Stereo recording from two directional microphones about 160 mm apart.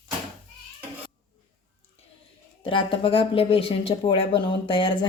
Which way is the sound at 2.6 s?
35° left (ahead or behind).